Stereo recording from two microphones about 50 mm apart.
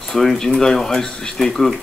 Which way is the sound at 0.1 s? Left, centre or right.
Centre.